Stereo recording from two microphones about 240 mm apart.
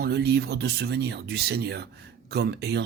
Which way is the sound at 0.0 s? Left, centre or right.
Right.